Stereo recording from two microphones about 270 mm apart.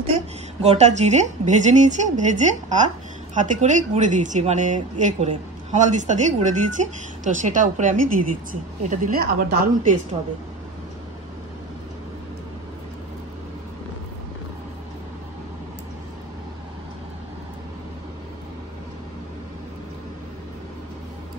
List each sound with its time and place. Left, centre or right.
0.6 s a woman's voice: right